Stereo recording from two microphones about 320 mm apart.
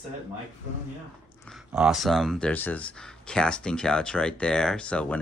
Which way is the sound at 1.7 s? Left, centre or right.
Centre.